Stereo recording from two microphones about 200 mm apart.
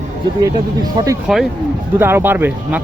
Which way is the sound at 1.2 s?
Centre (ahead or behind).